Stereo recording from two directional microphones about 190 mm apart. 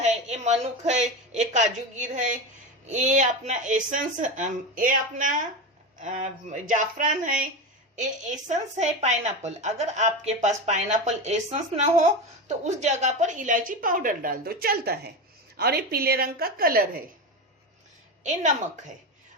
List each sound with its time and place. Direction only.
0.0 s a woman's voice: 35° right (ahead or behind)
18.2 s a woman's voice: 40° right (ahead or behind)